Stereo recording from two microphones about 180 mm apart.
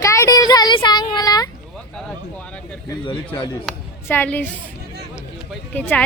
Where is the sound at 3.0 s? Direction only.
20° left (ahead or behind).